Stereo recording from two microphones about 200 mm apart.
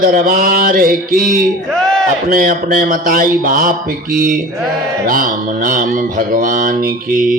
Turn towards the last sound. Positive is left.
turn(degrees=-40)  # may be behind; listen again after turning